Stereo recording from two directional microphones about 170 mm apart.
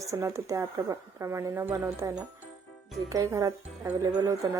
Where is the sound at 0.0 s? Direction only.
20° right (ahead or behind).